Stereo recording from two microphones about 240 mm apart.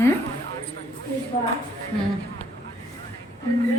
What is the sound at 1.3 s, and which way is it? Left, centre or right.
Speech, left.